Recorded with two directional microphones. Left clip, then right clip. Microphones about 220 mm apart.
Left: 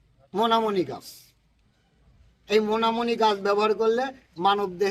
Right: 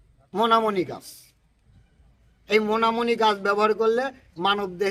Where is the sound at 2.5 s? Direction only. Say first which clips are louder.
Right 1 dB; centre (ahead or behind).